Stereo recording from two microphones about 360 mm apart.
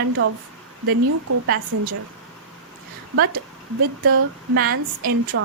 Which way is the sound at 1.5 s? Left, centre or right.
Right.